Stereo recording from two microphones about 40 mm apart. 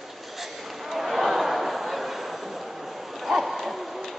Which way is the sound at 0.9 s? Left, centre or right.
Centre.